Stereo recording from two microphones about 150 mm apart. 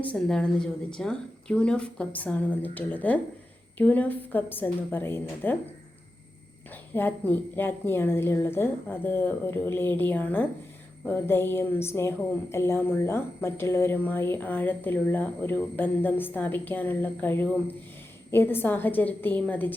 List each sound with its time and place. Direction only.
0.0 s speech: 10° left (ahead or behind)
6.9 s speech: 15° left (ahead or behind)